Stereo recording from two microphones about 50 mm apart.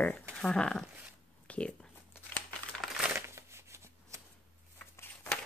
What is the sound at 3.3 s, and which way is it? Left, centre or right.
Shuffling cards, right.